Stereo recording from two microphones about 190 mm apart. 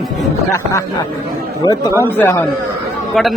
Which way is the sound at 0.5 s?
15° left (ahead or behind).